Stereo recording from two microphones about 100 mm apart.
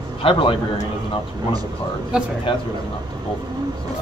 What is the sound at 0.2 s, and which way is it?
Speech, 60° left (ahead or behind).